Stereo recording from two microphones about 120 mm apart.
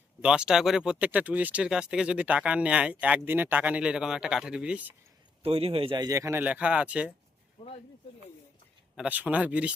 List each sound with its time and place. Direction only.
0.2 s speech: 5° right (ahead or behind)
5.4 s a man's voice: 55° right (ahead or behind)
6.0 s a man's voice: 30° right (ahead or behind)
6.4 s speech: 10° right (ahead or behind)
9.0 s speech: 10° right (ahead or behind)